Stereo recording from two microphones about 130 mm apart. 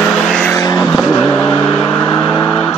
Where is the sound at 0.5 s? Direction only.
30° left (ahead or behind).